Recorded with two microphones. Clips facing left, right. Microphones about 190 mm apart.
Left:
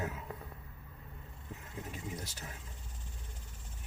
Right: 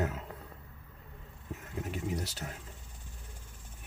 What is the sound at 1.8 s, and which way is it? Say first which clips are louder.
Speech: right 8 dB; 80° right.